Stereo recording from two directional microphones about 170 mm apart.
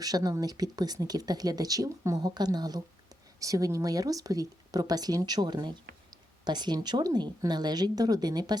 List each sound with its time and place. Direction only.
0.0 s speech: 20° right (ahead or behind)